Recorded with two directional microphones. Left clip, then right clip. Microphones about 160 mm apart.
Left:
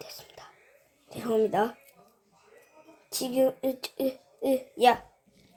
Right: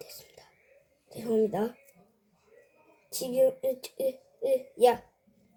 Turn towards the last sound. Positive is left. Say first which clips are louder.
# left 1 dB
turn(degrees=20)  # may be behind; listen again after turning